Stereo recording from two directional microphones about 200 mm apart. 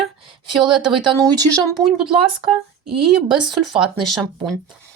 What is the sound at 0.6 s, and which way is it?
Speech, 25° right (ahead or behind).